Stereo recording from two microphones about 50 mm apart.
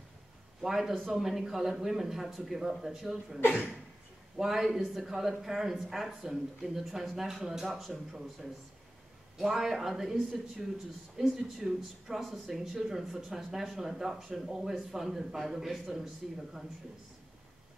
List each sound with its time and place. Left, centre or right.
0.6 s speech: centre
3.4 s speech: right
4.4 s speech: centre
9.4 s speech: centre